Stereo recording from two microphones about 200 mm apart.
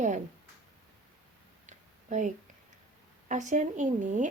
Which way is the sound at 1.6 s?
35° right (ahead or behind).